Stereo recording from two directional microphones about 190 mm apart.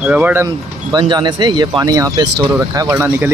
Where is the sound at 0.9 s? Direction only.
25° right (ahead or behind).